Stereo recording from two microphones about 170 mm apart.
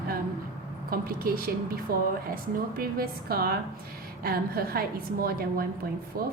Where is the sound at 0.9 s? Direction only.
60° right (ahead or behind).